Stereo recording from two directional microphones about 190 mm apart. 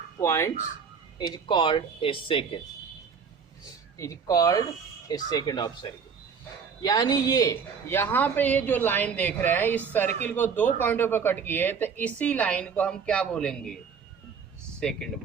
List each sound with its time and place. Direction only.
0.2 s a woman's voice: 15° left (ahead or behind)
1.2 s speech: 25° left (ahead or behind)
3.9 s a woman's voice: 15° left (ahead or behind)
14.8 s speech: 5° left (ahead or behind)